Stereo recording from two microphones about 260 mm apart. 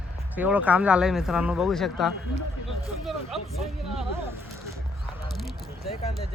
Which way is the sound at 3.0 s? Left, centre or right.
Centre.